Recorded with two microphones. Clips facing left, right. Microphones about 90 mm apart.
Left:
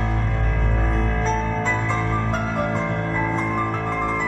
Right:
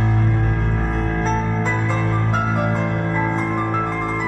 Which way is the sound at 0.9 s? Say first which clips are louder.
Right 2 dB; 30° right (ahead or behind).